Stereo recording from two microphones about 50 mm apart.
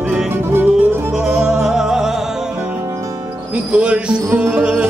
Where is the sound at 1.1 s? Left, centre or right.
Centre.